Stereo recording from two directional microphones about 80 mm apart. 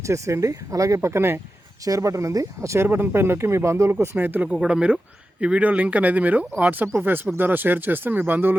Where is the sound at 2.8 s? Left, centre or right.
Right.